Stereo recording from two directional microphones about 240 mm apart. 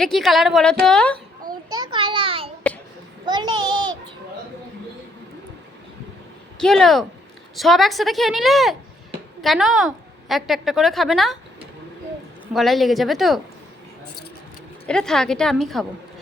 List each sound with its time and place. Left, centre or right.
0.0 s a woman's voice: centre
1.7 s a sound: centre
3.2 s child singing: centre
6.6 s a woman's voice: centre
12.5 s a woman's voice: centre
14.8 s a woman's voice: centre